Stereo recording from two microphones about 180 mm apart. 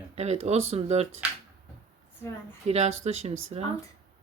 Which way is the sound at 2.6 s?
35° right (ahead or behind).